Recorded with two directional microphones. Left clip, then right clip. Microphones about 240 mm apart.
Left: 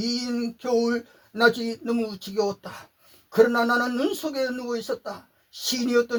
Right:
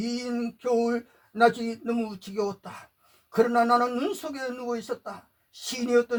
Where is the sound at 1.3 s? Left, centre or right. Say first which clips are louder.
Left 1 dB; left.